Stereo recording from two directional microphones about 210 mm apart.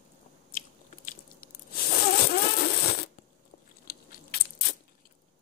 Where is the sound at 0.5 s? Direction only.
40° left (ahead or behind).